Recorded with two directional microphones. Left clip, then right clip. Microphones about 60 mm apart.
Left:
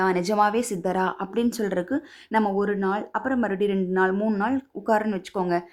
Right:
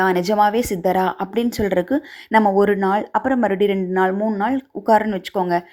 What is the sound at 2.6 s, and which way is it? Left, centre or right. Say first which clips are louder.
Speech: right 8 dB; right.